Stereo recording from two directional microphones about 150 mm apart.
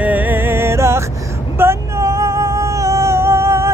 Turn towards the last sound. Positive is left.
turn(degrees=-20)  # may be behind; listen again after turning